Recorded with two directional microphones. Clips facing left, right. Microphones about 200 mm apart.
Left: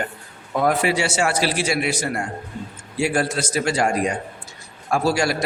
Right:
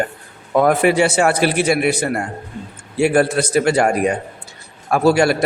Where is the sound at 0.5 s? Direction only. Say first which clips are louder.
Right 6 dB; 55° right (ahead or behind).